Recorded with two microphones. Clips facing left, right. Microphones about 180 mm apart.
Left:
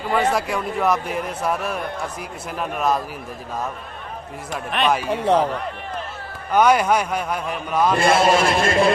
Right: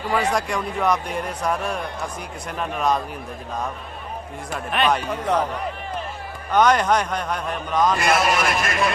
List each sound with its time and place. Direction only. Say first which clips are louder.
0.1 s speech: left 2 dB; 5° left (ahead or behind)
4.5 s speech: left 1 dB; centre (ahead or behind)
5.0 s a man's voice: left 4 dB; 30° left (ahead or behind)
6.5 s speech: left 1 dB; 10° left (ahead or behind)
7.9 s a man's voice: left 4 dB; 30° left (ahead or behind)